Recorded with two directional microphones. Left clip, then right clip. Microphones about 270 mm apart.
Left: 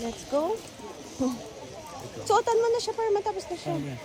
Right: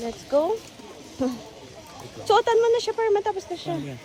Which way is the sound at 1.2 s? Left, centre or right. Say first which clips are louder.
Right 3 dB; centre.